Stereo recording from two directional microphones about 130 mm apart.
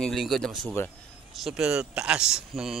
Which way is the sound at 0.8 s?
20° left (ahead or behind).